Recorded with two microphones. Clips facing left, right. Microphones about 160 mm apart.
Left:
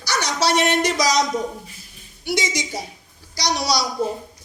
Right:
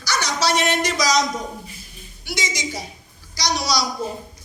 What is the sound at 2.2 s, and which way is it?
A man's voice, 60° left (ahead or behind).